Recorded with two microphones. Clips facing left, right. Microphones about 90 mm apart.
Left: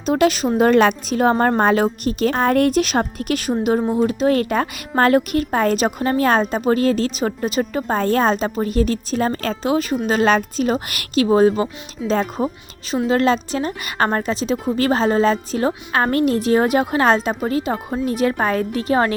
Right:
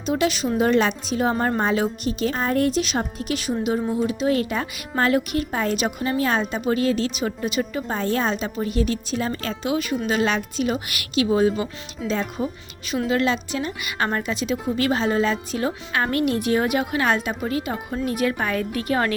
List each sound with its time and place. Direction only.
0.0 s speech: 50° left (ahead or behind)
2.3 s a woman's voice: 65° left (ahead or behind); by 19.1 s 30° left (ahead or behind)